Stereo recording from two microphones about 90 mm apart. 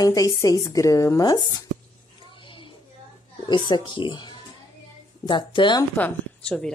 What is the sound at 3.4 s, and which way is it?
Speech, 55° left (ahead or behind).